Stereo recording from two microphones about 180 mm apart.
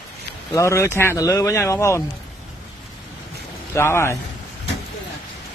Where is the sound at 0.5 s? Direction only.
15° left (ahead or behind).